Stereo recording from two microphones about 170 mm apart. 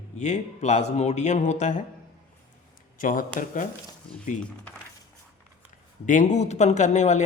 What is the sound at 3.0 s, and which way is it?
Speech, 55° left (ahead or behind).